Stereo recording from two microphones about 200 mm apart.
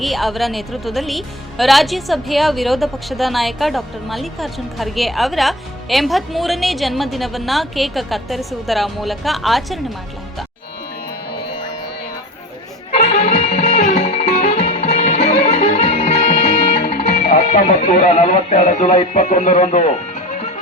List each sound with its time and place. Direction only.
0.0 s a woman's voice: centre (ahead or behind)
12.9 s music: 35° left (ahead or behind)
16.8 s speech: 45° left (ahead or behind)